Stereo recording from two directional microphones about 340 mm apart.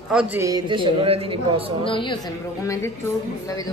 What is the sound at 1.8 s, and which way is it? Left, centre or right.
Speech, centre.